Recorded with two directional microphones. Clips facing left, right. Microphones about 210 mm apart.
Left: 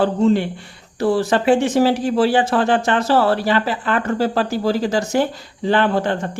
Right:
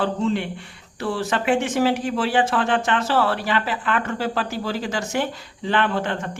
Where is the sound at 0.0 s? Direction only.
40° left (ahead or behind).